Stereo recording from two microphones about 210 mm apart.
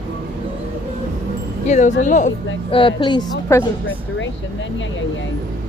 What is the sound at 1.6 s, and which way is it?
Speech, 35° left (ahead or behind).